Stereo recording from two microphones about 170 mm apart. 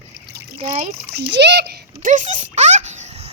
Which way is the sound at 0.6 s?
45° right (ahead or behind).